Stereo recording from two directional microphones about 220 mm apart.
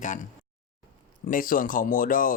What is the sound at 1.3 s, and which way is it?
Speech, 40° left (ahead or behind).